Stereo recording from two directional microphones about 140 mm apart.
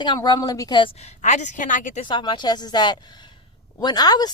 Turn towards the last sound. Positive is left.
turn(degrees=30)  # may be behind; listen again after turning